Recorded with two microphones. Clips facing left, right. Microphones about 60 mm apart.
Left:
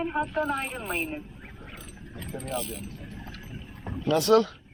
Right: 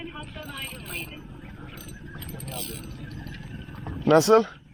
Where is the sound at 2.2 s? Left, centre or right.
Centre.